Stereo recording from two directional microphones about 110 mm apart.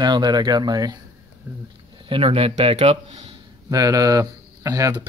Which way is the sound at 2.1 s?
55° right (ahead or behind).